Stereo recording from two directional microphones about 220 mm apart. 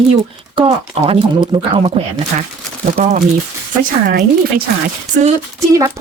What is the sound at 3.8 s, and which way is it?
Speech, 40° right (ahead or behind).